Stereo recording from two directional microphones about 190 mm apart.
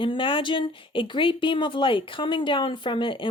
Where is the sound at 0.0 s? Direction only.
25° left (ahead or behind).